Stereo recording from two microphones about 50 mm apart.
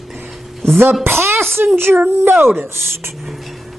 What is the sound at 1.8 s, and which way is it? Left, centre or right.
Speech, right.